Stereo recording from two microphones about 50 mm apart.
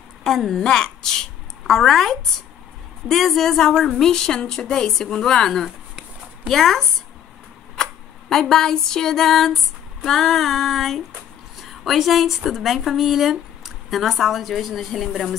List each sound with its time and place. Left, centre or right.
0.2 s a woman's voice: centre
7.7 s a sound: centre
10.0 s a woman's voice: centre